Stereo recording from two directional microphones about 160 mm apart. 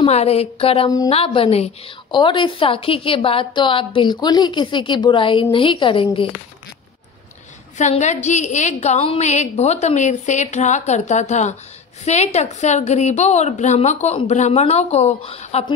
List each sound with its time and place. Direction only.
0.0 s a woman's voice: 40° left (ahead or behind)
0.8 s a woman's voice: 20° left (ahead or behind)
1.1 s a woman's voice: 35° left (ahead or behind)
7.7 s a woman's voice: 45° left (ahead or behind)